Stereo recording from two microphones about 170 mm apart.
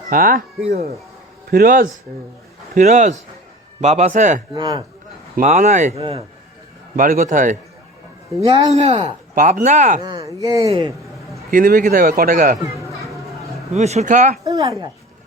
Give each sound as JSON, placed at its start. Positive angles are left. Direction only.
{"t": 0.1, "sound": "speech", "side_deg": -55}
{"t": 1.5, "sound": "speech", "side_deg": -55}
{"t": 4.5, "sound": "speech", "side_deg": -25}
{"t": 5.4, "sound": "speech", "side_deg": -45}
{"t": 6.9, "sound": "speech", "side_deg": -50}
{"t": 8.4, "sound": "speech", "side_deg": -25}
{"t": 8.7, "sound": "speech", "side_deg": -35}
{"t": 9.3, "sound": "speech", "side_deg": -55}
{"t": 10.0, "sound": "speech", "side_deg": -20}
{"t": 11.5, "sound": "speech", "side_deg": -55}
{"t": 13.7, "sound": "speech", "side_deg": -40}